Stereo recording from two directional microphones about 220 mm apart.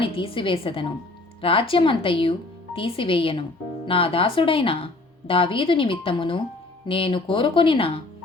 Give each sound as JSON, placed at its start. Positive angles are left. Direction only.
{"t": 0.0, "sound": "a woman's voice", "side_deg": 25}